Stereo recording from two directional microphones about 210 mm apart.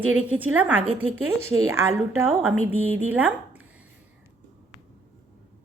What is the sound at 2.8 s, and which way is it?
Speech, 75° right (ahead or behind).